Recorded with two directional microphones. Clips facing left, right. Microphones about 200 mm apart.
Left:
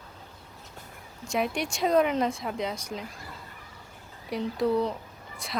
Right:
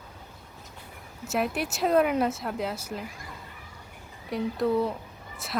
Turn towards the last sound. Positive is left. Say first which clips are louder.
# right 1 dB
turn(degrees=-5)  # may be behind; listen again after turning